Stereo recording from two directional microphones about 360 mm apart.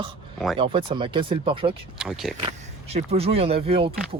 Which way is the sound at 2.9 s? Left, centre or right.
Centre.